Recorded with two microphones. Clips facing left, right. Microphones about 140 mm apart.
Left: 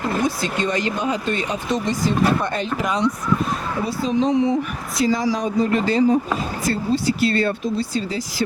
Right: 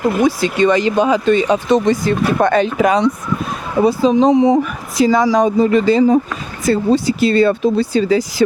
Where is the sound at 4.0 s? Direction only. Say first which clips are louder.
Right 5 dB; 90° right.